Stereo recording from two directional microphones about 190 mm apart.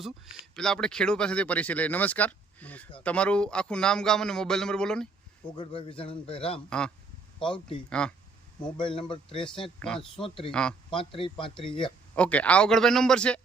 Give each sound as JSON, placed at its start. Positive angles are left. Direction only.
{"t": 0.0, "sound": "a man's voice", "side_deg": 0}
{"t": 5.5, "sound": "a man's voice", "side_deg": 30}
{"t": 6.7, "sound": "a man's voice", "side_deg": 5}
{"t": 7.4, "sound": "a man's voice", "side_deg": 25}
{"t": 7.9, "sound": "a man's voice", "side_deg": 5}
{"t": 8.8, "sound": "a man's voice", "side_deg": 25}
{"t": 9.6, "sound": "a man's voice", "side_deg": 5}
{"t": 10.2, "sound": "a man's voice", "side_deg": 30}
{"t": 10.5, "sound": "a man's voice", "side_deg": 5}
{"t": 10.9, "sound": "a man's voice", "side_deg": 25}
{"t": 12.1, "sound": "a man's voice", "side_deg": 5}